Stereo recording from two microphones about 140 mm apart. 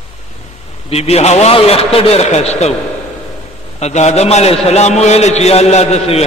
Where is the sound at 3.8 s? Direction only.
55° left (ahead or behind).